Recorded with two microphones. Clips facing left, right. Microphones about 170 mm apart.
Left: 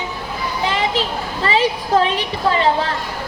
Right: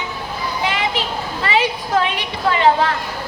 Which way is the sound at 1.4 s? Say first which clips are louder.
Left 2 dB; 35° left (ahead or behind).